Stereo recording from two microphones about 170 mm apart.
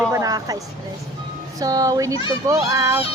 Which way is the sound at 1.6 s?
20° right (ahead or behind).